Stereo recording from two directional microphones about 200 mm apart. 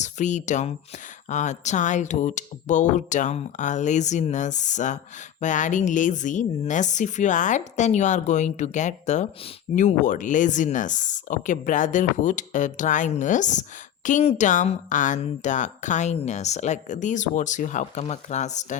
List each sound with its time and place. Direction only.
0.0 s speech: 35° left (ahead or behind)